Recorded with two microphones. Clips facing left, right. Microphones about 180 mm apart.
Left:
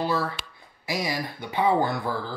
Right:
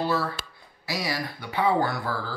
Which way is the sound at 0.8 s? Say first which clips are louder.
Left 1 dB; 20° left (ahead or behind).